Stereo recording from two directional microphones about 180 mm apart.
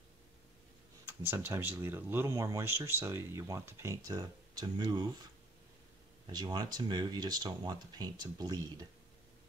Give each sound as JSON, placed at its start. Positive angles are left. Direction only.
{"t": 1.0, "sound": "speech", "side_deg": -10}
{"t": 6.2, "sound": "speech", "side_deg": -25}